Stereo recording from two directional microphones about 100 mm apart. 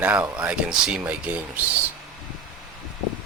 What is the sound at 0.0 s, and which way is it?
Speech, 15° right (ahead or behind).